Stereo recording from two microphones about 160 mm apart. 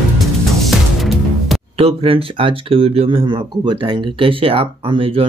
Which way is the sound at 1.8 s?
35° right (ahead or behind).